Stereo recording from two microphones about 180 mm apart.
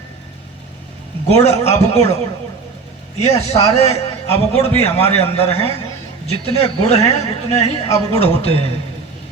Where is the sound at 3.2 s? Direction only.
35° left (ahead or behind).